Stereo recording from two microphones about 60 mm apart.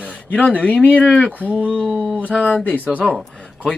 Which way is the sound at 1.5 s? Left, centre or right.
Centre.